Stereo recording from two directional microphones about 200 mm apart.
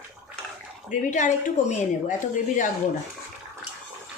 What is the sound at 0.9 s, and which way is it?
Speech, 40° left (ahead or behind).